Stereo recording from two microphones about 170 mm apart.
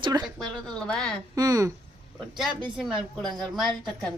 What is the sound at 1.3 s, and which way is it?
Speech, 20° right (ahead or behind).